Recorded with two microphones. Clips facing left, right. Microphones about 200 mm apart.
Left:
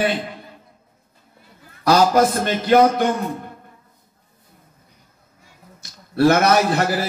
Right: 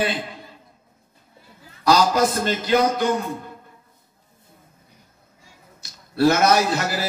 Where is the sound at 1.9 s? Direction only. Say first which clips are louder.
Left 3 dB; 55° left (ahead or behind).